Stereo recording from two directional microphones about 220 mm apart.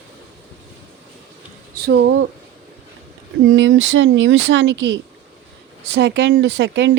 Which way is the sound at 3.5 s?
55° right (ahead or behind).